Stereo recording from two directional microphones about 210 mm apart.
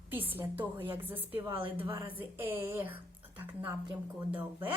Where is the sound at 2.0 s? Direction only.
10° right (ahead or behind).